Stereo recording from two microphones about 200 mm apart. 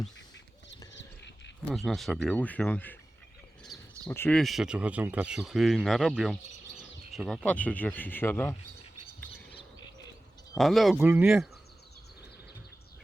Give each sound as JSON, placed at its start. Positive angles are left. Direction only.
{"t": 0.9, "sound": "a sound", "side_deg": 60}
{"t": 1.7, "sound": "speech", "side_deg": 0}
{"t": 3.6, "sound": "bird", "side_deg": 0}
{"t": 4.1, "sound": "speech", "side_deg": 10}
{"t": 10.6, "sound": "speech", "side_deg": 0}
{"t": 10.9, "sound": "speech", "side_deg": -10}